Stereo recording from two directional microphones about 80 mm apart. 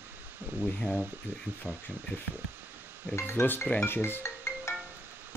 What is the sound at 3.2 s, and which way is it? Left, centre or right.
Speech, left.